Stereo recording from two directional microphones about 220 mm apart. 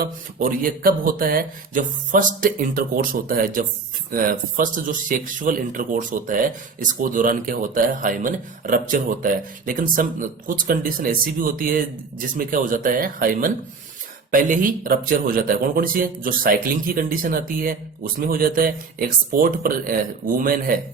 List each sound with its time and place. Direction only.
0.0 s speech: 40° right (ahead or behind)